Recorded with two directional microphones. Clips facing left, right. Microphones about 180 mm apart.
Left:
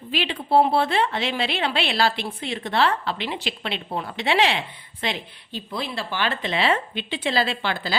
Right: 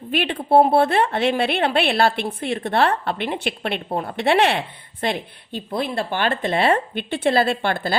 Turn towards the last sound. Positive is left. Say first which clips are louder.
# right 5 dB
turn(degrees=-55)  # may be behind; listen again after turning